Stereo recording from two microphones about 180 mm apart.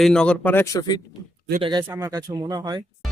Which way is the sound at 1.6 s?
25° right (ahead or behind).